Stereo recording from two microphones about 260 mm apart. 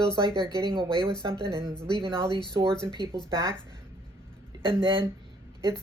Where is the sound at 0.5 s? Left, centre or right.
Centre.